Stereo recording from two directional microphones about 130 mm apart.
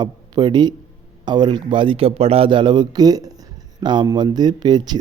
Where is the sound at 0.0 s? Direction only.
35° right (ahead or behind).